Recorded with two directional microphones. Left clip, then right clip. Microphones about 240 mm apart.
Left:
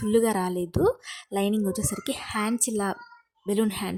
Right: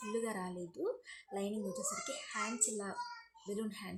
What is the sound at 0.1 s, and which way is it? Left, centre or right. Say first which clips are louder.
A woman's voice: left 17 dB; left.